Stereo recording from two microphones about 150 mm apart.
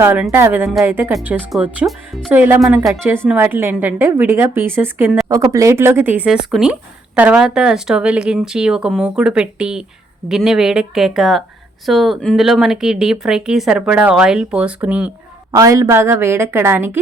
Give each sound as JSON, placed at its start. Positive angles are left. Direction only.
{"t": 0.0, "sound": "a woman's voice", "side_deg": -15}
{"t": 3.0, "sound": "a woman's voice", "side_deg": -15}
{"t": 15.5, "sound": "a woman's voice", "side_deg": -20}